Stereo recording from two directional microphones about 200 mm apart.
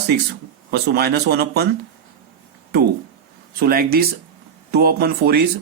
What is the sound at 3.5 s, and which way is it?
Speech, 50° right (ahead or behind).